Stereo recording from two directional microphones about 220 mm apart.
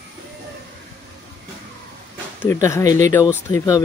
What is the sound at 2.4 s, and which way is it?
Speech, 10° left (ahead or behind).